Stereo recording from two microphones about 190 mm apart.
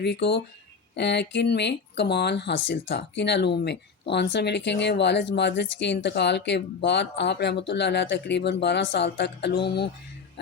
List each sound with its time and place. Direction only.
0.0 s speech: 60° left (ahead or behind)